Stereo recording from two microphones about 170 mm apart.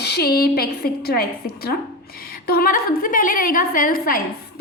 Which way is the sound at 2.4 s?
60° left (ahead or behind).